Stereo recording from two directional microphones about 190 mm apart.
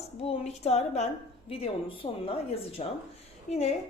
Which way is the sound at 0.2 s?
30° left (ahead or behind).